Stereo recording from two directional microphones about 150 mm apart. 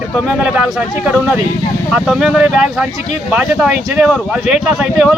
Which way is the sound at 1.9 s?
5° right (ahead or behind).